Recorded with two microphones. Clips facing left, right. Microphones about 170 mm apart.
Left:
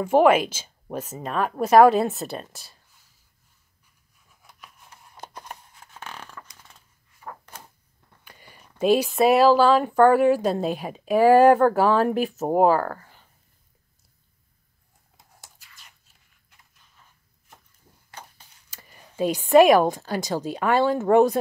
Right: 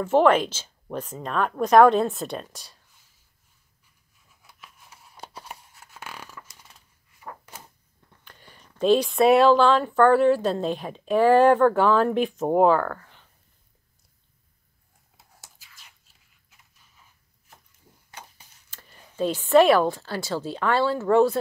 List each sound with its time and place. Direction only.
0.0 s speech: 10° left (ahead or behind)
4.4 s a sound: centre (ahead or behind)
7.2 s door: 5° right (ahead or behind)
8.2 s speech: 10° left (ahead or behind)
15.1 s a sound: centre (ahead or behind)
18.7 s a woman's voice: 10° left (ahead or behind)